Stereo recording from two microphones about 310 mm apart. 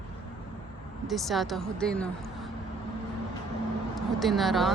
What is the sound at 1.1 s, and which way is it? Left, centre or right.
Speech, centre.